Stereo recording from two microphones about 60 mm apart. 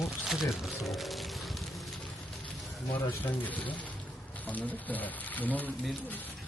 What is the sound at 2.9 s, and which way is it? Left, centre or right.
Speech, left.